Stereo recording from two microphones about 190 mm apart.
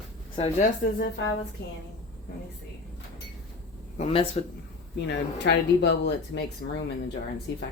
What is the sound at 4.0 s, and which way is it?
Speech, 30° left (ahead or behind).